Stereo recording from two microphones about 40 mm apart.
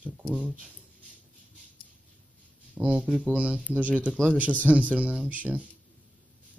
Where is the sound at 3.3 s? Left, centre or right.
Right.